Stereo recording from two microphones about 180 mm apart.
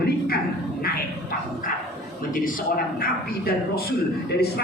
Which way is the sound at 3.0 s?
55° left (ahead or behind).